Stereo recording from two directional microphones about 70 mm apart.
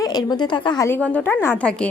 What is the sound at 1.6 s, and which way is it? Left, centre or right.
Speech, centre.